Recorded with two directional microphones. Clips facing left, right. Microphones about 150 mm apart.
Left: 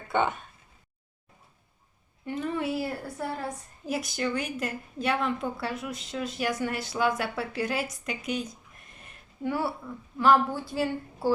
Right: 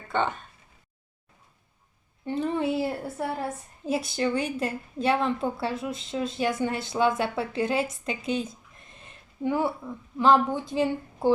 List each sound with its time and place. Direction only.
0.1 s speech: 10° left (ahead or behind)
2.2 s a woman's voice: 30° right (ahead or behind)
9.0 s a sound: 20° right (ahead or behind)
10.2 s a woman's voice: 20° right (ahead or behind)